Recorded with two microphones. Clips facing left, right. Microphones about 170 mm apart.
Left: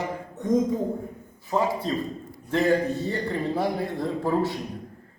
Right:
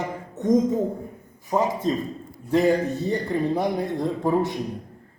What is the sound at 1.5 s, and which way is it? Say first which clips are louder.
A man's voice: right 2 dB; 15° right (ahead or behind).